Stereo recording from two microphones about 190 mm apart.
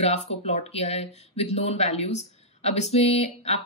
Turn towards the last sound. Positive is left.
turn(degrees=35)  # may be behind; listen again after turning